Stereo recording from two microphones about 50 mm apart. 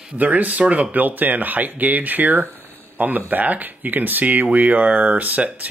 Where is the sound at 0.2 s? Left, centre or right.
Right.